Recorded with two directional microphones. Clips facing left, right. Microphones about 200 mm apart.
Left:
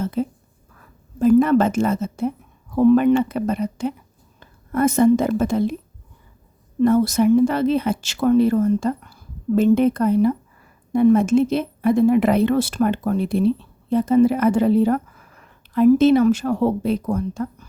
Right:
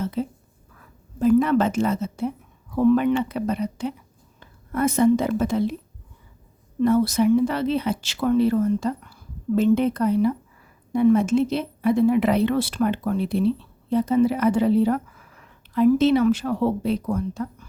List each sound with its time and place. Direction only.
0.0 s a woman's voice: 50° left (ahead or behind)
6.8 s speech: 45° left (ahead or behind)